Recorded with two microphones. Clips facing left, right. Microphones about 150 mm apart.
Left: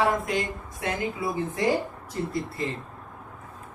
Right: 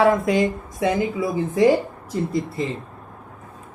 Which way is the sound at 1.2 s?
90° right.